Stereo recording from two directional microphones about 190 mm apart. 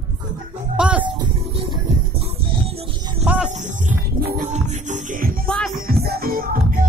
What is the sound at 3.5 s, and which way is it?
Wild animals, 40° right (ahead or behind).